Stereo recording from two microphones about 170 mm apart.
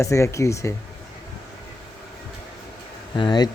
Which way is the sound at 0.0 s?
15° left (ahead or behind).